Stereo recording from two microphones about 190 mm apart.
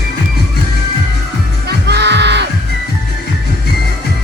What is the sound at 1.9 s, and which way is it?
Music, 60° right (ahead or behind).